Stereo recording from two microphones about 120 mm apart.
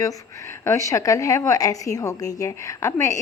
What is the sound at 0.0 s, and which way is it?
A woman's voice, 25° left (ahead or behind).